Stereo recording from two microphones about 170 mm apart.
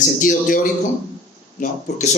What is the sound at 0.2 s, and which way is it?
Speech, 55° left (ahead or behind).